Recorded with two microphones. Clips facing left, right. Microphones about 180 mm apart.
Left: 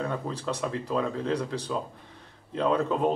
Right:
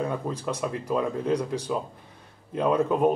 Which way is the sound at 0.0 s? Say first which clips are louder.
Right 2 dB; 10° right (ahead or behind).